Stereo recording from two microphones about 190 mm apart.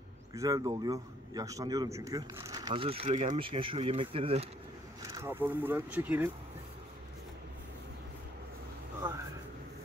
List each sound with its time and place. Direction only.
0.3 s a man's voice: 20° right (ahead or behind)
5.0 s speech: 15° right (ahead or behind)